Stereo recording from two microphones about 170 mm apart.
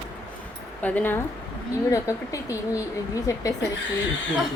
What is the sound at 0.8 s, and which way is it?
A woman's voice, 10° left (ahead or behind).